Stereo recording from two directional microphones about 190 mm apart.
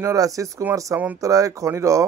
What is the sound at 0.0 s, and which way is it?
Speech, 15° right (ahead or behind).